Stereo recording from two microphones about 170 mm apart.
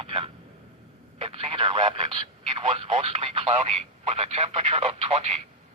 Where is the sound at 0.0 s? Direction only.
30° right (ahead or behind).